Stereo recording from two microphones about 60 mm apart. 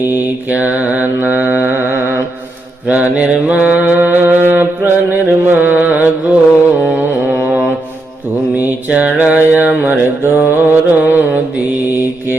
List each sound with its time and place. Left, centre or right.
0.1 s mantra: right
2.8 s mantra: right
8.5 s mantra: right